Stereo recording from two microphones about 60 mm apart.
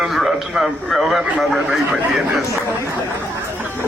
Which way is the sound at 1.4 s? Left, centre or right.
Centre.